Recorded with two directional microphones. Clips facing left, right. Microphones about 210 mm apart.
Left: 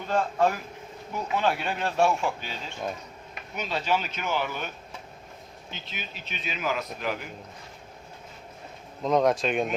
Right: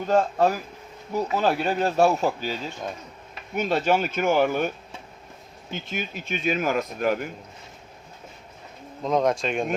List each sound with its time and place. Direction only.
0.1 s speech: 40° right (ahead or behind)
3.5 s speech: 50° right (ahead or behind)
5.7 s speech: 50° right (ahead or behind)
9.0 s speech: centre (ahead or behind)